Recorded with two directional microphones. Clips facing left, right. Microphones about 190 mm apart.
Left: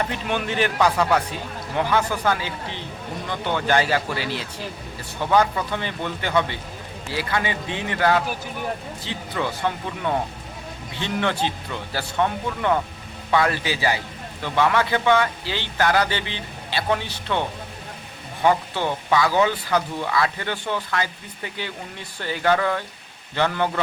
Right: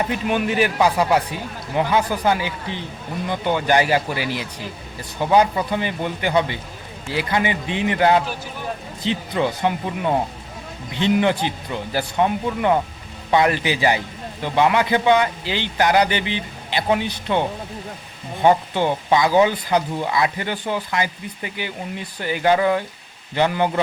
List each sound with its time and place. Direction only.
0.0 s speech: 10° right (ahead or behind)
18.4 s speech: 15° right (ahead or behind)